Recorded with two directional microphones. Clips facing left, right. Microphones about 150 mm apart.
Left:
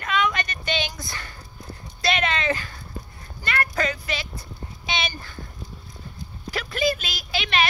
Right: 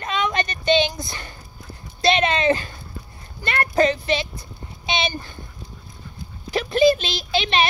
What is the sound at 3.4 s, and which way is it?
Clip-clop, 25° right (ahead or behind).